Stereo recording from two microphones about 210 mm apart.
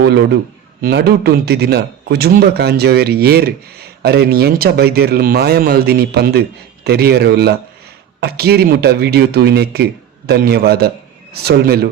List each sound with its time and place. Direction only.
0.0 s a man's voice: 55° right (ahead or behind)